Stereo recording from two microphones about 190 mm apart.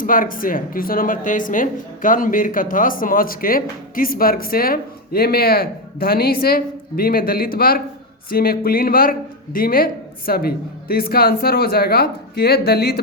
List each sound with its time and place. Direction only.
0.0 s speech: 45° left (ahead or behind)